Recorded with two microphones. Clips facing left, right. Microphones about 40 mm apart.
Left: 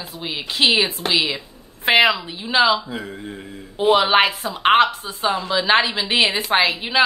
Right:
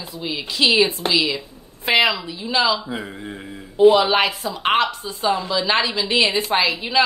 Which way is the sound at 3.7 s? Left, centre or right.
Left.